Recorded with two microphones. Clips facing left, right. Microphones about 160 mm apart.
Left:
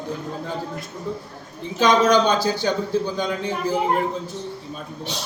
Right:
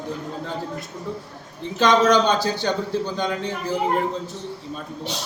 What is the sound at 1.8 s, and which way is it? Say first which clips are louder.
A man's voice: even; centre (ahead or behind).